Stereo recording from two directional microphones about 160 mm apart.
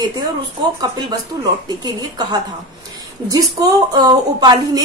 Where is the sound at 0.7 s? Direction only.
25° right (ahead or behind).